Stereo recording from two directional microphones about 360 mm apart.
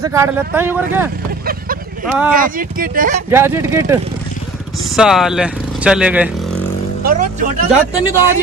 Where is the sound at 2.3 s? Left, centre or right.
Right.